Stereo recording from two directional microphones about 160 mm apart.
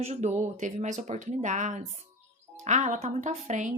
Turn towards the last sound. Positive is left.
turn(degrees=-45)  # may be behind; listen again after turning